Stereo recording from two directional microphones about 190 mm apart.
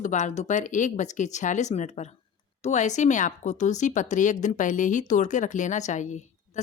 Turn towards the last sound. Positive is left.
turn(degrees=40)  # may be behind; listen again after turning